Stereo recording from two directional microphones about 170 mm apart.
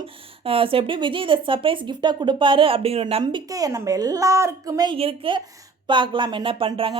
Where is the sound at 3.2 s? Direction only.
20° right (ahead or behind).